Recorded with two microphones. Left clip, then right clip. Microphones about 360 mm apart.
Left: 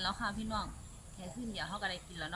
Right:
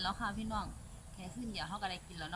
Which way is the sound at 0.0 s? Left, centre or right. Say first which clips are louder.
Left 1 dB; centre.